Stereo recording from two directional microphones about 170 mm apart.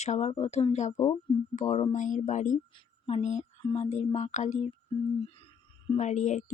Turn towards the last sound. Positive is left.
turn(degrees=45)  # may be behind; listen again after turning